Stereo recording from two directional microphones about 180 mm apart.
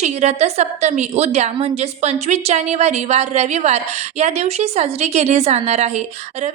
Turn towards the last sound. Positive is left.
turn(degrees=-40)  # may be behind; listen again after turning